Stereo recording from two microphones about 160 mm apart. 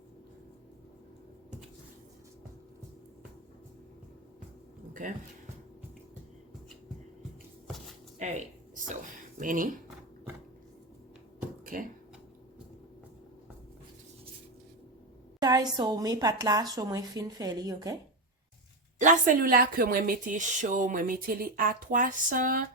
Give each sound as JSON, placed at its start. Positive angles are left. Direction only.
{"t": 8.2, "sound": "speech", "side_deg": -50}
{"t": 11.6, "sound": "a sound", "side_deg": -60}
{"t": 15.4, "sound": "speech", "side_deg": -25}
{"t": 18.9, "sound": "speech", "side_deg": -50}